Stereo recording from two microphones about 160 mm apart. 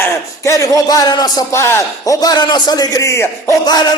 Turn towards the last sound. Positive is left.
turn(degrees=20)  # may be behind; listen again after turning